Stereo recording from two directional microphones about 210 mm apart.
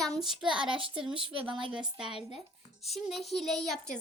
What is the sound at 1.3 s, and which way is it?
Speech, 25° right (ahead or behind).